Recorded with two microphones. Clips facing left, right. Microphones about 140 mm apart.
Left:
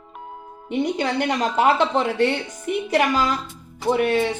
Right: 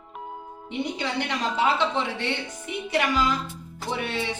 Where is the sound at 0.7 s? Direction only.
50° left (ahead or behind).